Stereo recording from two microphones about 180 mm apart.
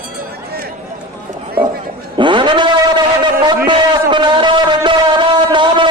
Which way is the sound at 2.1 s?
25° right (ahead or behind).